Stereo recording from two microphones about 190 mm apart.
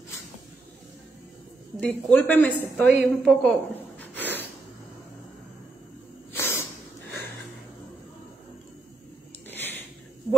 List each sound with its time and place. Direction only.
1.8 s a woman's voice: 10° left (ahead or behind)
4.0 s snort: 10° left (ahead or behind)
6.3 s snake: 10° left (ahead or behind)
9.5 s a sound: 10° left (ahead or behind)